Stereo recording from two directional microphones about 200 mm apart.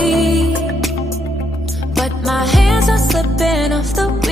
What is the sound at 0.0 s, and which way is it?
Music, centre (ahead or behind).